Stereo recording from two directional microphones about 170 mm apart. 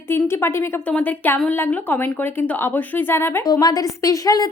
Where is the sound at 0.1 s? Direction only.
15° left (ahead or behind).